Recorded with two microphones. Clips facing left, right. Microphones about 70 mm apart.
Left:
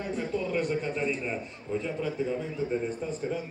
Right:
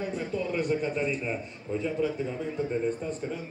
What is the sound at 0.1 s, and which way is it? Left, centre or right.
A man's voice, centre.